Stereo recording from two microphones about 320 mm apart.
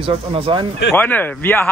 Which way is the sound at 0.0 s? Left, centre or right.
Centre.